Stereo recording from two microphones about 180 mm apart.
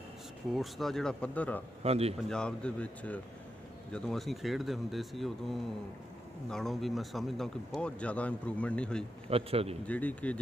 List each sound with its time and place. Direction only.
0.5 s speech: centre (ahead or behind)
1.8 s a man's voice: 35° right (ahead or behind)
2.2 s speech: 5° left (ahead or behind)
9.3 s a man's voice: 35° right (ahead or behind)
9.8 s speech: 10° left (ahead or behind)